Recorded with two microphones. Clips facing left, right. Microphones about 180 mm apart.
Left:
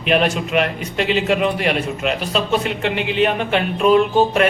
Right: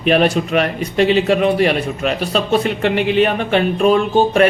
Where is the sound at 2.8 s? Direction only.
50° right (ahead or behind).